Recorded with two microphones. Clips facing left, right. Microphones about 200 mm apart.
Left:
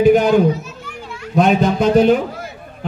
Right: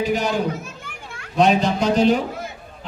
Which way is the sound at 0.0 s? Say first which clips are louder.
Left 10 dB; 55° left (ahead or behind).